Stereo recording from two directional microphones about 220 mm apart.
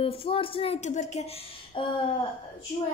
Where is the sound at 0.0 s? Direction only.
25° left (ahead or behind).